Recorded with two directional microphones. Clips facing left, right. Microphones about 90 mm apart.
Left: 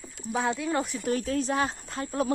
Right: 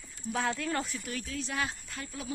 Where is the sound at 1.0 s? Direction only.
40° left (ahead or behind).